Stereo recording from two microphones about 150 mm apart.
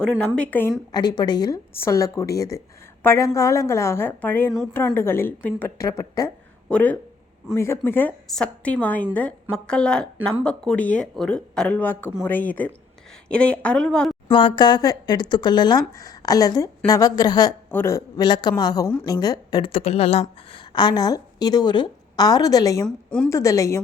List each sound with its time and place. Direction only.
0.3 s speech: 10° left (ahead or behind)
0.9 s speech: 30° left (ahead or behind)
1.7 s speech: 20° left (ahead or behind)
5.7 s a woman's voice: 20° left (ahead or behind); by 14.2 s 5° left (ahead or behind)
14.3 s speech: 35° left (ahead or behind)
17.7 s a woman's voice: 15° left (ahead or behind); by 20.2 s 45° left (ahead or behind)
20.5 s a woman's voice: 30° left (ahead or behind)
23.0 s a woman's voice: 5° left (ahead or behind)
23.3 s speech: 20° left (ahead or behind)